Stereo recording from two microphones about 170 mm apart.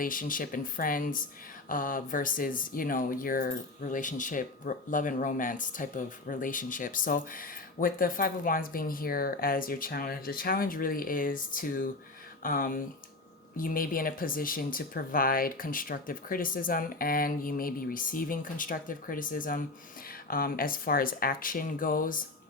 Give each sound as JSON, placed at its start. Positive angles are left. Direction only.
{"t": 0.0, "sound": "speech", "side_deg": 55}